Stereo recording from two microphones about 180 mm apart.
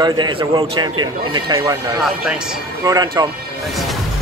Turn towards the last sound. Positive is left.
turn(degrees=-20)  # may be behind; listen again after turning